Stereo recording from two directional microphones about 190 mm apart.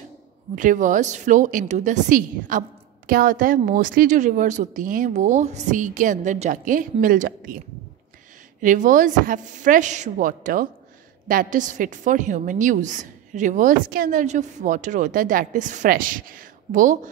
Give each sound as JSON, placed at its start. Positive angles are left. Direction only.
{"t": 0.6, "sound": "a woman's voice", "side_deg": -40}